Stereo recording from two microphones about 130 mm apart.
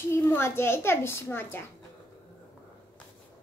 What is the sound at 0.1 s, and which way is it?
A child's voice, 20° left (ahead or behind).